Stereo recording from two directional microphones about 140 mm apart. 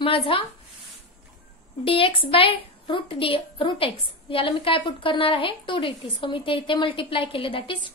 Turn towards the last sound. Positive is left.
turn(degrees=40)  # may be behind; listen again after turning